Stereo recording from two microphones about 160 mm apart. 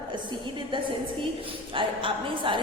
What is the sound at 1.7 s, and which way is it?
Speech, 30° right (ahead or behind).